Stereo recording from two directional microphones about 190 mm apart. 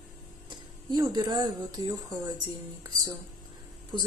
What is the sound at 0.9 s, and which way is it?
A woman's voice, 25° right (ahead or behind).